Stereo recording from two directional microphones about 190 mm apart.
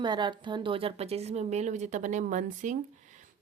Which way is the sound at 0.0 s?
25° right (ahead or behind).